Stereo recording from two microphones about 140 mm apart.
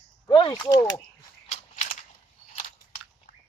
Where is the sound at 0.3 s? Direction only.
35° left (ahead or behind).